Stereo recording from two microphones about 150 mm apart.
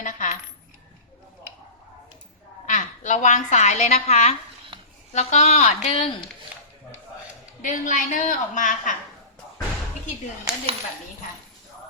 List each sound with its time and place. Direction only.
0.0 s coin: 60° left (ahead or behind)
2.6 s a woman's voice: 55° left (ahead or behind)
7.6 s a woman's voice: 60° left (ahead or behind)